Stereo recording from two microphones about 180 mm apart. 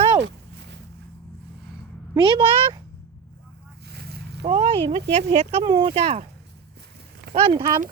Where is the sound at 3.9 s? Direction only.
60° right (ahead or behind).